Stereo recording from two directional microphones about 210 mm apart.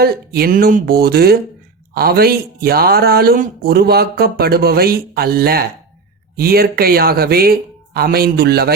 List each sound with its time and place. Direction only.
0.0 s speech: 45° right (ahead or behind)